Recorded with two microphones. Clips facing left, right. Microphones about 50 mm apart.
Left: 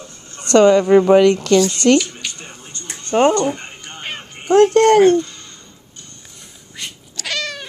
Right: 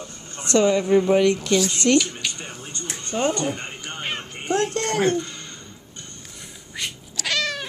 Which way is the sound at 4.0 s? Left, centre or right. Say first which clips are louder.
Even; centre.